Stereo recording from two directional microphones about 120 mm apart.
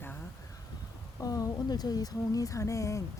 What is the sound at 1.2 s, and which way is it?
Speech, 30° left (ahead or behind).